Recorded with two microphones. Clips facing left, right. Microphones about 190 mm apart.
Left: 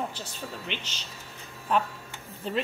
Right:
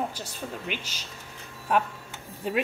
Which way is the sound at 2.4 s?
10° right (ahead or behind).